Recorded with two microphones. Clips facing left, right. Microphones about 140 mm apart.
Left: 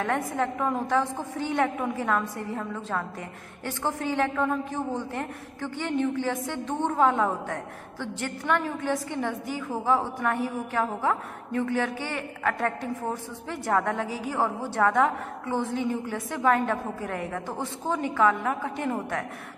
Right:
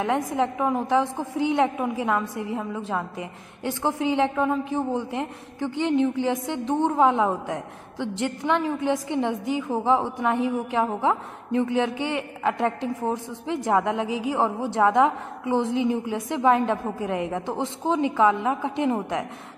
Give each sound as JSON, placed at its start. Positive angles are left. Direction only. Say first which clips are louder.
{"t": 0.0, "sound": "a woman's voice", "louder": "right 3 dB", "side_deg": -15}